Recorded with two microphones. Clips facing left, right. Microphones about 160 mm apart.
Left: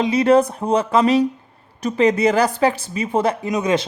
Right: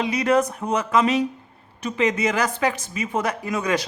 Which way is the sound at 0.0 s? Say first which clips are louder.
Left 5 dB; 30° left (ahead or behind).